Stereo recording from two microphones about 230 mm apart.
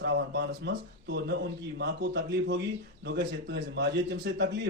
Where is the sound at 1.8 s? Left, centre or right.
Right.